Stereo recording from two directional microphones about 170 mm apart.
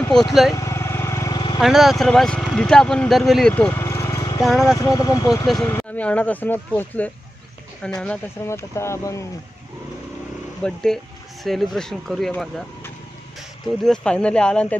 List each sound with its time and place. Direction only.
0.1 s speech: centre (ahead or behind)
0.6 s vehicle: 15° left (ahead or behind)
1.6 s speech: centre (ahead or behind); by 5.5 s 20° left (ahead or behind)
5.7 s speech: 10° left (ahead or behind)
8.5 s speech: 15° left (ahead or behind)
10.6 s speech: 5° left (ahead or behind)
13.8 s speech: 5° left (ahead or behind)